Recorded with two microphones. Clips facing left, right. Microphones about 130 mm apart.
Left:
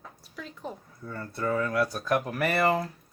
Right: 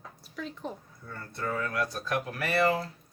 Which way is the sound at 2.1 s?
45° left (ahead or behind).